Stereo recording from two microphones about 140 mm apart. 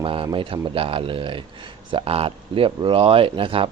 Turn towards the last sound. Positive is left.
turn(degrees=-40)  # may be behind; listen again after turning